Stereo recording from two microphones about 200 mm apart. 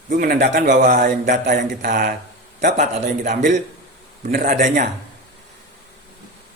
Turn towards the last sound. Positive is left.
turn(degrees=-45)  # may be behind; listen again after turning